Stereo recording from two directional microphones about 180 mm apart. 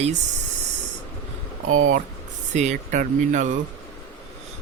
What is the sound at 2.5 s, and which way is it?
Speech, 40° right (ahead or behind).